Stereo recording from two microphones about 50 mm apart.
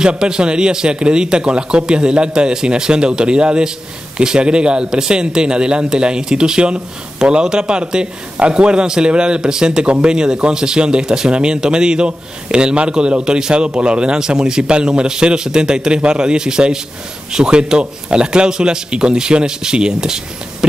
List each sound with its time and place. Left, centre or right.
0.0 s speech: centre